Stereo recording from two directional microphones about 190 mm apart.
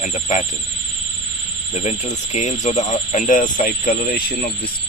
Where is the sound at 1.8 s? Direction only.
35° left (ahead or behind).